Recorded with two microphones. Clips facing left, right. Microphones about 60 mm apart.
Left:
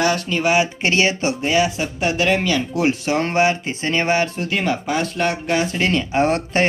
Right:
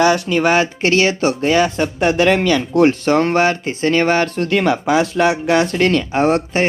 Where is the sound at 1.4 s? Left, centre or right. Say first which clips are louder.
Right 3 dB; right.